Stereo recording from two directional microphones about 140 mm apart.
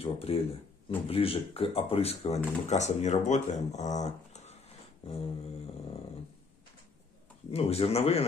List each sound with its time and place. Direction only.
0.0 s speech: 45° left (ahead or behind)
7.5 s speech: 45° left (ahead or behind)